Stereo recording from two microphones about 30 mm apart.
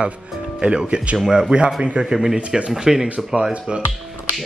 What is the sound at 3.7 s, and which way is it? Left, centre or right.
Speech, right.